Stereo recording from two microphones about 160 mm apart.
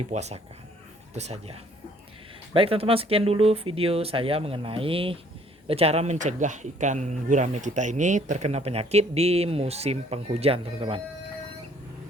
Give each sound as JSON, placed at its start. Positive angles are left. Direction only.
{"t": 0.1, "sound": "speech", "side_deg": -45}